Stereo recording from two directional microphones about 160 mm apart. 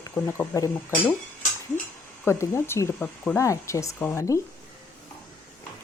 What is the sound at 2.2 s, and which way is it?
Speech, 15° left (ahead or behind).